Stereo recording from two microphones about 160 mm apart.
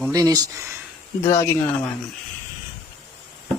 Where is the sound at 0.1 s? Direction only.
20° right (ahead or behind).